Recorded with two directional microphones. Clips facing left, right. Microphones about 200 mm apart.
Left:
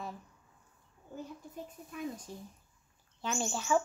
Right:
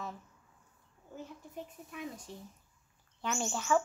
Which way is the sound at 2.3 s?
40° left (ahead or behind).